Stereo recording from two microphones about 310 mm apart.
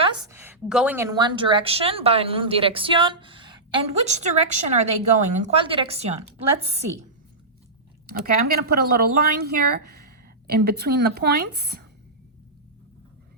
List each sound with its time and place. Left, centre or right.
0.0 s a woman's voice: centre
8.2 s speech: right